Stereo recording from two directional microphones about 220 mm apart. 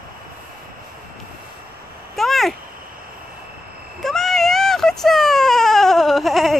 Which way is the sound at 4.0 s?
Centre (ahead or behind).